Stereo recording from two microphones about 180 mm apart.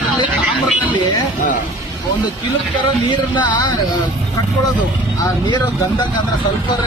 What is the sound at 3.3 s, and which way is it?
Music, 25° left (ahead or behind).